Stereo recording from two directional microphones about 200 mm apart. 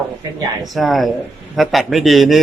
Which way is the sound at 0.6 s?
Centre (ahead or behind).